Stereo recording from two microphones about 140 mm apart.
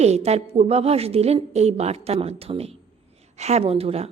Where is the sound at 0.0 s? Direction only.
50° right (ahead or behind).